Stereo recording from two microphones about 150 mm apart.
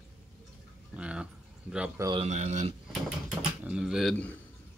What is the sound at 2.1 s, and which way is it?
Speech, 45° right (ahead or behind).